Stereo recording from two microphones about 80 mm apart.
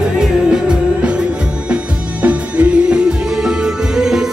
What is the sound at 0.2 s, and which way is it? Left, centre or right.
Music, centre.